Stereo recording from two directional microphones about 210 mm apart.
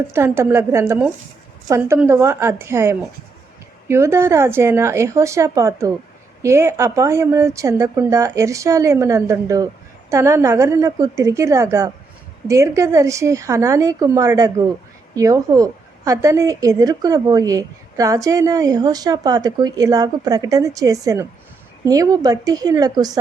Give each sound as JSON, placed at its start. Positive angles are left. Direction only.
{"t": 0.1, "sound": "a woman's voice", "side_deg": -10}